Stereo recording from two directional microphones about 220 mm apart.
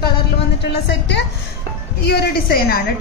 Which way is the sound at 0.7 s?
50° left (ahead or behind).